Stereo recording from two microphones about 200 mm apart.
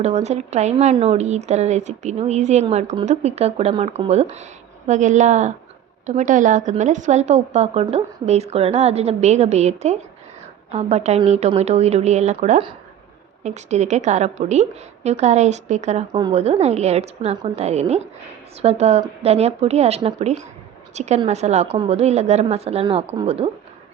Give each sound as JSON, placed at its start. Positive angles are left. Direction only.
{"t": 0.0, "sound": "a woman's voice", "side_deg": -35}